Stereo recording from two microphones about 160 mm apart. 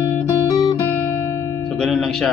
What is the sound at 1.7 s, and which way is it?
Music, centre (ahead or behind).